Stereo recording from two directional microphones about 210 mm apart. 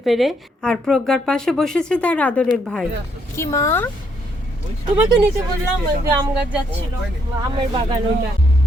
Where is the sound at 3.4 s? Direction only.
15° left (ahead or behind).